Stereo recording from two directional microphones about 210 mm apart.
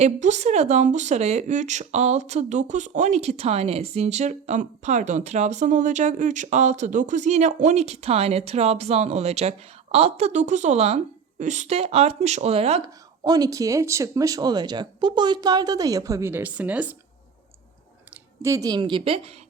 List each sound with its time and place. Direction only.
0.0 s speech: 35° right (ahead or behind)
12.8 s speech: 15° right (ahead or behind)
18.4 s a woman's voice: 15° right (ahead or behind)